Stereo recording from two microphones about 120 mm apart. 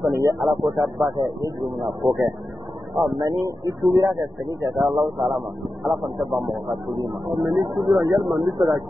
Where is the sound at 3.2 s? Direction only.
30° right (ahead or behind).